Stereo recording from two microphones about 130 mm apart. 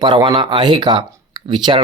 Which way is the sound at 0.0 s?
35° right (ahead or behind).